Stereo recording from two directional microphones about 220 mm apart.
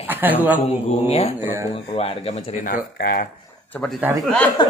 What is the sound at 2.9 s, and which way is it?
Speech, 40° left (ahead or behind).